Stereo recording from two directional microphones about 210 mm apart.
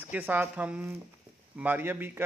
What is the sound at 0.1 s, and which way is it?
A man's voice, 10° right (ahead or behind).